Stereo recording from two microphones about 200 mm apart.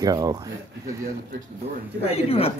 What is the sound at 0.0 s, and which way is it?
Speech, 20° right (ahead or behind).